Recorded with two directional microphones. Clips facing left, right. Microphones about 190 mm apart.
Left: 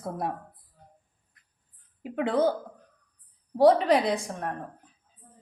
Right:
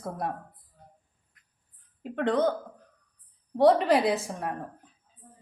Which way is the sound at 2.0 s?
5° left (ahead or behind).